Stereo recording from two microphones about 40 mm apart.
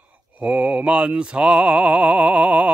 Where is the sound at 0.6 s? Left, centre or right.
Right.